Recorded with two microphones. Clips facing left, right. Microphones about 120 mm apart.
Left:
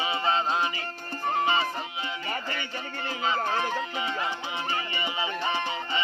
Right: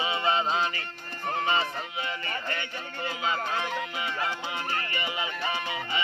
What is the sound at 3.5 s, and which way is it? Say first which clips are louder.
Music: left 2 dB; 40° left (ahead or behind).